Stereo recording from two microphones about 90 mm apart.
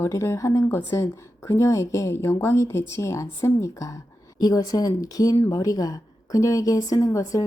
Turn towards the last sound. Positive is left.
turn(degrees=40)  # may be behind; listen again after turning